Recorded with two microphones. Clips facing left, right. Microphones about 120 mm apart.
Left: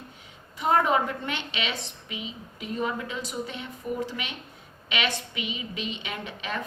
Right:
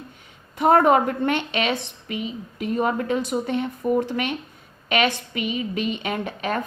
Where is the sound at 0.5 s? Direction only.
55° right (ahead or behind).